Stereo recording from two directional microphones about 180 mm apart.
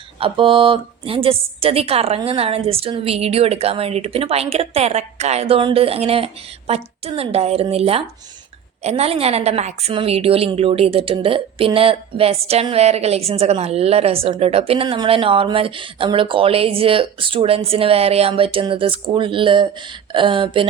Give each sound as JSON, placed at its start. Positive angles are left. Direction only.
{"t": 0.2, "sound": "a woman's voice", "side_deg": -30}